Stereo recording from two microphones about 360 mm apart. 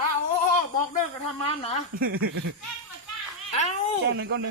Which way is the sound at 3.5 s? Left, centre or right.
Centre.